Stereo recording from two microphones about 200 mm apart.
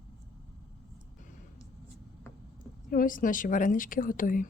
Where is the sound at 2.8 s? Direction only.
45° left (ahead or behind).